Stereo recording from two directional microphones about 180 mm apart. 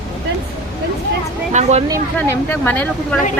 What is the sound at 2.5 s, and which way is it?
Speech, 10° left (ahead or behind).